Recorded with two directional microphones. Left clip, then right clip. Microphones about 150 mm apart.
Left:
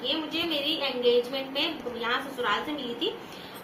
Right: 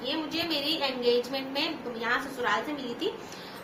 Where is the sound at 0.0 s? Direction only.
15° right (ahead or behind).